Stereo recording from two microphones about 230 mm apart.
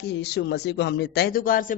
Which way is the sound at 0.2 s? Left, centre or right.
Left.